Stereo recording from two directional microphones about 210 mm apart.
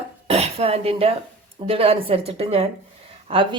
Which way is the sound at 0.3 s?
30° right (ahead or behind).